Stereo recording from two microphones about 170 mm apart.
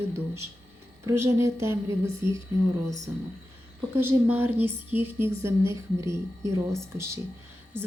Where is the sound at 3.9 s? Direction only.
15° right (ahead or behind).